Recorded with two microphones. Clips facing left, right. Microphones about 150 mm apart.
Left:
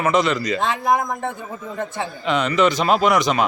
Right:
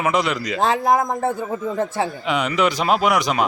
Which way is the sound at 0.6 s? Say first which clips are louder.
Right 4 dB; 35° right (ahead or behind).